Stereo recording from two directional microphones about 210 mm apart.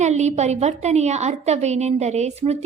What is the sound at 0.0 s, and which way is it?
A woman's voice, 35° right (ahead or behind).